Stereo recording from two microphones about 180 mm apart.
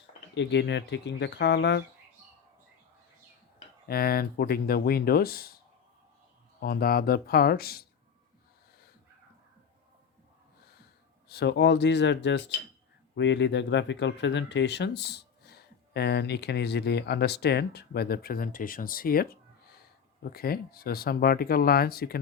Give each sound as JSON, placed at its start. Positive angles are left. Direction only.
{"t": 0.3, "sound": "speech", "side_deg": 75}
{"t": 3.8, "sound": "speech", "side_deg": 55}
{"t": 6.6, "sound": "speech", "side_deg": 55}
{"t": 11.3, "sound": "speech", "side_deg": 70}